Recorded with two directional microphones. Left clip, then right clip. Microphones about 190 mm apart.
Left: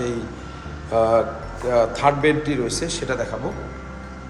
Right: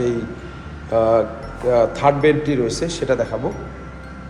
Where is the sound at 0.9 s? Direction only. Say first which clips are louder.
Right 2 dB; 15° left (ahead or behind).